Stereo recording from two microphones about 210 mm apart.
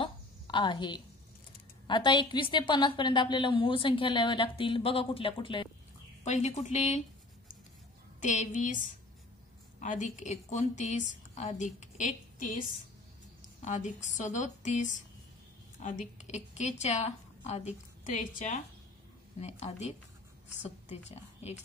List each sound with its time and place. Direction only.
0.0 s a sound: 20° left (ahead or behind)
1.9 s a woman's voice: 20° left (ahead or behind)
8.2 s a woman's voice: 35° left (ahead or behind)
9.8 s a woman's voice: 35° left (ahead or behind)
20.9 s a woman's voice: 30° left (ahead or behind)